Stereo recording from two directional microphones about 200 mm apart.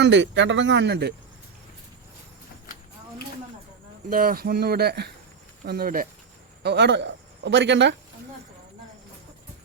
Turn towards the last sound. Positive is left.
turn(degrees=-65)  # may be behind; listen again after turning